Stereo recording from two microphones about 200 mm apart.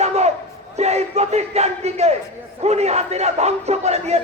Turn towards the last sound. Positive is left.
turn(degrees=-35)  # may be behind; listen again after turning